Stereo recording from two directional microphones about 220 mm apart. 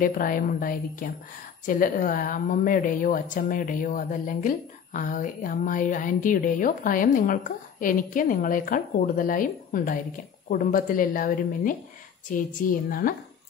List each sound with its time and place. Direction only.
0.0 s a woman's voice: 40° left (ahead or behind)